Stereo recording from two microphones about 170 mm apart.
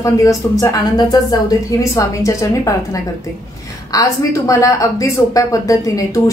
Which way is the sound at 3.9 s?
20° left (ahead or behind).